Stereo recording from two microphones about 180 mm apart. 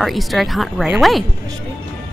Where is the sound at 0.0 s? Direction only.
Centre (ahead or behind).